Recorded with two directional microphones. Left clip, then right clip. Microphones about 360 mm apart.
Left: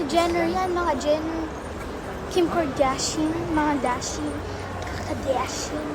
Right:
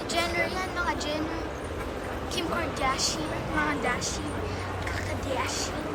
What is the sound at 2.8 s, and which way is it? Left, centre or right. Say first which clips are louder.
Speech: left 5 dB; centre.